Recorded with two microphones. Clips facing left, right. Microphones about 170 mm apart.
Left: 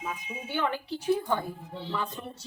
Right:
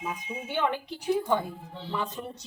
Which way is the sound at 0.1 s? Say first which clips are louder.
Even; 15° right (ahead or behind).